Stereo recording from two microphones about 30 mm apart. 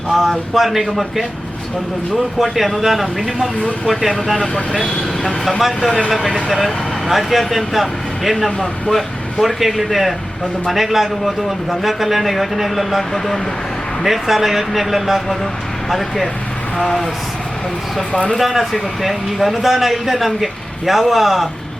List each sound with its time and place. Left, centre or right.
0.1 s speech: centre
5.5 s speech: centre
13.0 s speech: centre
14.0 s speech: centre
18.1 s speech: left
18.3 s speech: centre